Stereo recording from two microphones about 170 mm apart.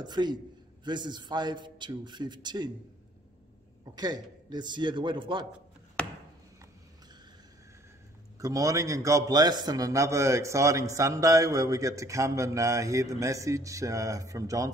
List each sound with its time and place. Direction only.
0.0 s a man's voice: 25° right (ahead or behind)
3.9 s a man's voice: 25° right (ahead or behind)
8.4 s a man's voice: 20° right (ahead or behind)